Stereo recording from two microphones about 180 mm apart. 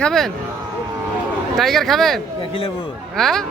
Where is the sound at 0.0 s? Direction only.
Centre (ahead or behind).